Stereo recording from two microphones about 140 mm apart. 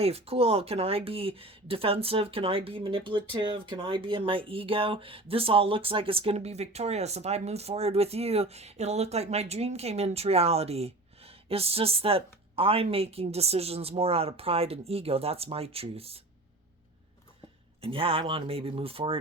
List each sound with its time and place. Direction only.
0.0 s speech: 45° right (ahead or behind)
17.7 s speech: 40° right (ahead or behind)